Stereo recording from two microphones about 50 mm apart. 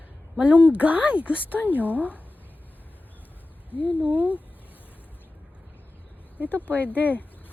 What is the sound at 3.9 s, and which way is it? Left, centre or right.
Speech, right.